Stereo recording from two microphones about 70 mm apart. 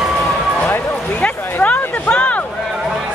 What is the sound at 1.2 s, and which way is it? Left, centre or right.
Music, centre.